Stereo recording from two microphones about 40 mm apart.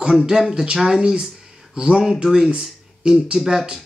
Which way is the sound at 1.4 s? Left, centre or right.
Centre.